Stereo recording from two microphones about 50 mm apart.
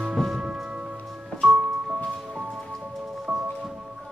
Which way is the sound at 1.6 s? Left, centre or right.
Centre.